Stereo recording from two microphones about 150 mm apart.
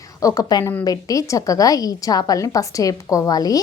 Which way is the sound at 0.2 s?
25° left (ahead or behind).